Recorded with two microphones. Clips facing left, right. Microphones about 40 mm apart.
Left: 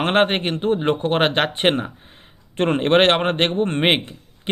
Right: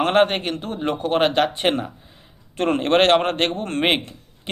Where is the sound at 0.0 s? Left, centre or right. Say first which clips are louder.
Even; left.